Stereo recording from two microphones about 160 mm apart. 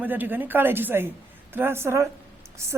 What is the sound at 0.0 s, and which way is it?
A man's voice, 10° right (ahead or behind).